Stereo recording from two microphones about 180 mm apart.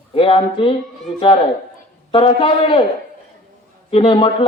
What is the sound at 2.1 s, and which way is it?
Speech, 30° left (ahead or behind).